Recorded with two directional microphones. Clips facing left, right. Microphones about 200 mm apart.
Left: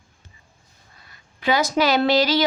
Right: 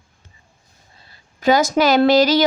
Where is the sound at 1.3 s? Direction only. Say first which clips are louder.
Right 5 dB; 45° right (ahead or behind).